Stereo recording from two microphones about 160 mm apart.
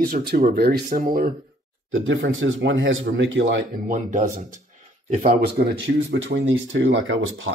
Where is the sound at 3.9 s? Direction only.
50° right (ahead or behind).